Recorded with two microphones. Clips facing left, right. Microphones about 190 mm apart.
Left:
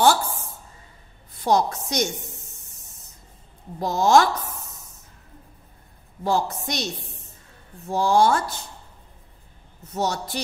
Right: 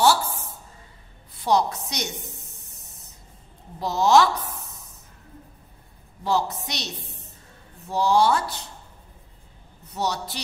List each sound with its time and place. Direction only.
1.4 s a woman's voice: 45° left (ahead or behind)
3.8 s a woman's voice: 50° left (ahead or behind)
6.2 s a woman's voice: 50° left (ahead or behind)
9.9 s a woman's voice: 50° left (ahead or behind)